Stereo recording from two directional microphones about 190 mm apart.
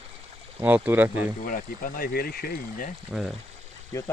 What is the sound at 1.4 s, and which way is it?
Speech, 45° left (ahead or behind).